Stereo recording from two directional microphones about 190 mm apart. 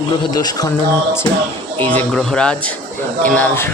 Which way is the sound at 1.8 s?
10° left (ahead or behind).